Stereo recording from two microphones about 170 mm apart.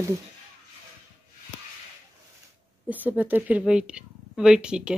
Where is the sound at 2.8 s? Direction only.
10° right (ahead or behind).